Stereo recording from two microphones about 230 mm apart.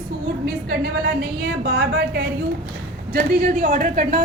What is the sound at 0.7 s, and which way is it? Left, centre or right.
A woman's voice, right.